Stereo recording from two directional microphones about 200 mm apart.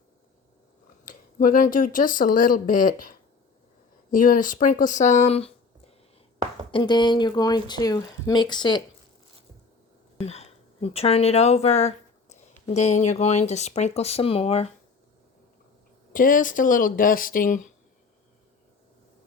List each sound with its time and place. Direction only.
1.0 s speech: 45° left (ahead or behind)
6.7 s speech: 25° left (ahead or behind)
10.2 s speech: 30° left (ahead or behind)
16.1 s speech: 45° left (ahead or behind)